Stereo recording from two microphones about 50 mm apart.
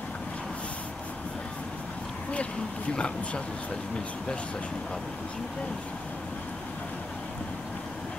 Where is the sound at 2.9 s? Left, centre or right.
Left.